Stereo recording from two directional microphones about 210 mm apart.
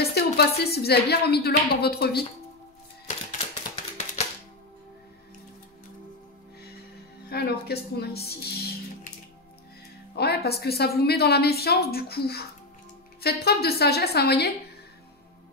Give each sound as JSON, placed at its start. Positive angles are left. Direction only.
{"t": 0.0, "sound": "a woman's voice", "side_deg": 50}
{"t": 7.2, "sound": "speech", "side_deg": 50}
{"t": 10.1, "sound": "a woman's voice", "side_deg": 50}